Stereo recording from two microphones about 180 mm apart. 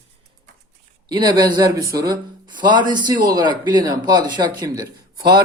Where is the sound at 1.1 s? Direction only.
25° right (ahead or behind).